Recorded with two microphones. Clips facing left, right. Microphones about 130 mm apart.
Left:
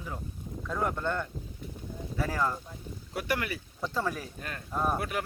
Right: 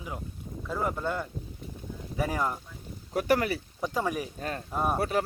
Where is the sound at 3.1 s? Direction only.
40° right (ahead or behind).